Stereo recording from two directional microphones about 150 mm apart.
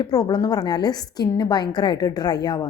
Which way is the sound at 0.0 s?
25° left (ahead or behind).